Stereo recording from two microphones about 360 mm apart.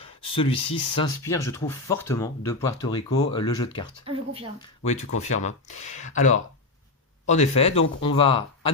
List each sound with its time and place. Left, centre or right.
0.0 s speech: centre
4.0 s speech: centre
4.8 s speech: centre